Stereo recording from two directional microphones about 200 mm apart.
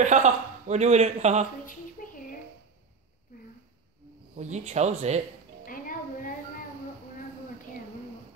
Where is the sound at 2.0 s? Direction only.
45° left (ahead or behind).